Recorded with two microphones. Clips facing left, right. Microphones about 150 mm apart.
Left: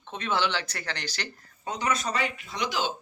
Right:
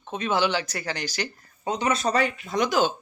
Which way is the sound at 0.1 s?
10° right (ahead or behind).